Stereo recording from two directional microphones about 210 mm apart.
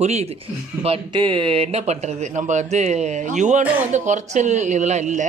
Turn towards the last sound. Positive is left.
turn(degrees=-35)  # may be behind; listen again after turning